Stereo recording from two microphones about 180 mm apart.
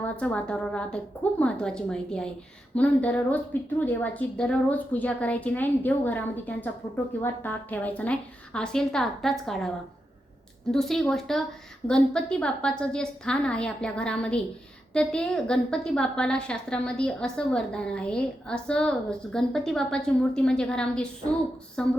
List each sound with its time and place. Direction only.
0.0 s a woman's voice: 5° left (ahead or behind)